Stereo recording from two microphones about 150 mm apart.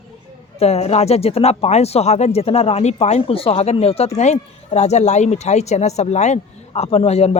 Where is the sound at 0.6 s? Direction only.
45° left (ahead or behind).